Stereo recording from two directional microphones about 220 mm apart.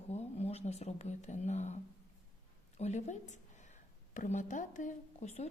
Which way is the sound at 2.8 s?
30° left (ahead or behind).